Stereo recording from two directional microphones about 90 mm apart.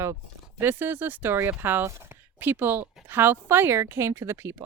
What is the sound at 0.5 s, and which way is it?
Speech, 25° right (ahead or behind).